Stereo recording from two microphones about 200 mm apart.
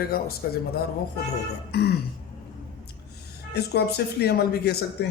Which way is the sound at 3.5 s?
55° left (ahead or behind).